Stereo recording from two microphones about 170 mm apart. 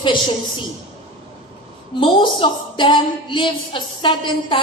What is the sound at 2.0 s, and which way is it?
A woman's voice, 30° left (ahead or behind).